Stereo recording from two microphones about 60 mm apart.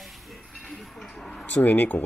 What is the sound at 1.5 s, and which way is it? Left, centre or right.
Speech, left.